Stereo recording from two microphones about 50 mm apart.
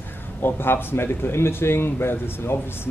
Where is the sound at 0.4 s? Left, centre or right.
Left.